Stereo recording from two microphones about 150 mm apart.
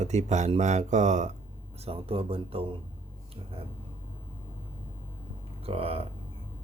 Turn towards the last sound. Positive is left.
turn(degrees=-40)  # may be behind; listen again after turning